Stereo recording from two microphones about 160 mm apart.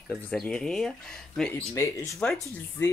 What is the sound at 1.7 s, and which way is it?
Speech, 20° left (ahead or behind).